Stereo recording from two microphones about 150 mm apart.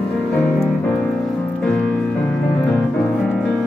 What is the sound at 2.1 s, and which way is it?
Music, 10° left (ahead or behind).